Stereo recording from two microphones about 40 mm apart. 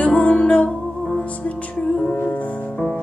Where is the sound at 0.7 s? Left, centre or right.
Centre.